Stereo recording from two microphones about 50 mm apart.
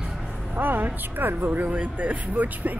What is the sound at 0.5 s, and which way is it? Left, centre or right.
Speech, right.